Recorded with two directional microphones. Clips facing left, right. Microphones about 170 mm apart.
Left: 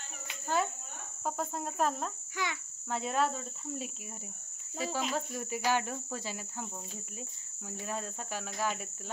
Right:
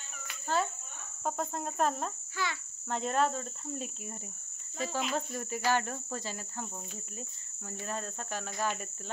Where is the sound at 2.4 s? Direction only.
15° left (ahead or behind).